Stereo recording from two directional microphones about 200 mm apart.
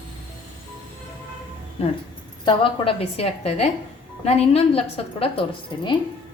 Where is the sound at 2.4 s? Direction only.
25° left (ahead or behind).